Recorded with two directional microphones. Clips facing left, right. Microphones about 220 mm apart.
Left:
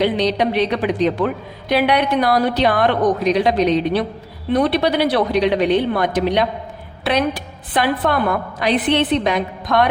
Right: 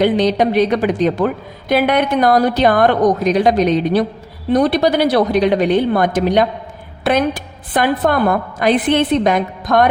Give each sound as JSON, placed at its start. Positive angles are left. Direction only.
{"t": 0.0, "sound": "a woman's voice", "side_deg": -45}